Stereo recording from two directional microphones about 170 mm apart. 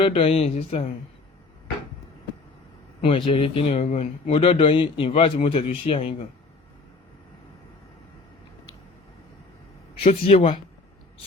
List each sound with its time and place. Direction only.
0.0 s speech: 35° left (ahead or behind)
3.0 s speech: 30° left (ahead or behind)
10.0 s speech: 35° left (ahead or behind)